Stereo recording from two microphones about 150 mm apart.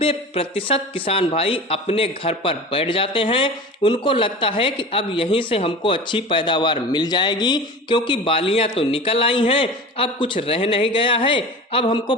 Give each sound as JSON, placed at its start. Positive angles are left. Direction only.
{"t": 0.0, "sound": "speech", "side_deg": 40}